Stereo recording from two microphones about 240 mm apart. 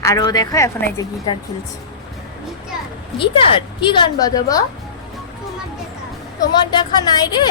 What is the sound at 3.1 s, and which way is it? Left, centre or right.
A woman's voice, left.